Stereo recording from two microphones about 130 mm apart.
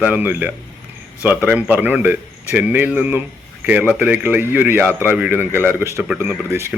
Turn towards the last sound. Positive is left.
turn(degrees=-20)  # may be behind; listen again after turning